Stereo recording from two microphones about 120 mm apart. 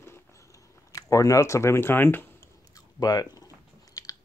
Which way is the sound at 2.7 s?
30° left (ahead or behind).